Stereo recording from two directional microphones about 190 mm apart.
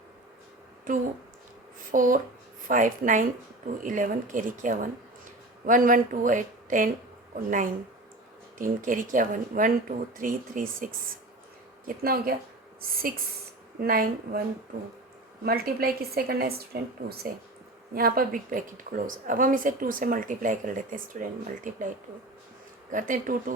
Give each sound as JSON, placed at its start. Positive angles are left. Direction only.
{"t": 0.9, "sound": "speech", "side_deg": -45}
{"t": 8.5, "sound": "speech", "side_deg": -45}
{"t": 11.9, "sound": "speech", "side_deg": -50}
{"t": 15.4, "sound": "speech", "side_deg": -55}